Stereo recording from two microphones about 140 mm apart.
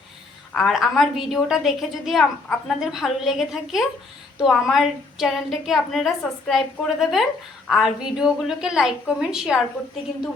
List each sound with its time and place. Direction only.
0.5 s a woman's voice: centre (ahead or behind)